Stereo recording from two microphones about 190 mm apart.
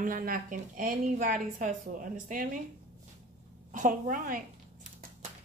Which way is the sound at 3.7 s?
45° right (ahead or behind).